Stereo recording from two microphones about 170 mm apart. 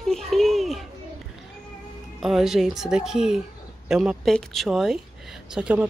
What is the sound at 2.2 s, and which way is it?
A woman's voice, centre (ahead or behind).